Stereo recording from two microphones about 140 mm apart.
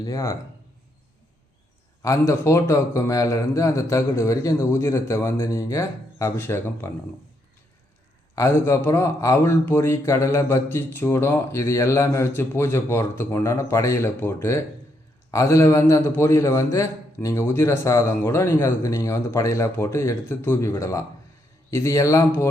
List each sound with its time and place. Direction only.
0.0 s speech: 25° left (ahead or behind)
2.0 s speech: 20° left (ahead or behind)
8.4 s speech: 20° left (ahead or behind)